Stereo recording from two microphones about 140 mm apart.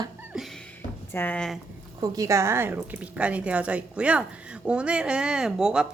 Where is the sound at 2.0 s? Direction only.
20° right (ahead or behind).